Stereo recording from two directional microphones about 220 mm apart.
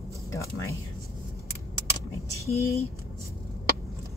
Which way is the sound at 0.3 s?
15° left (ahead or behind).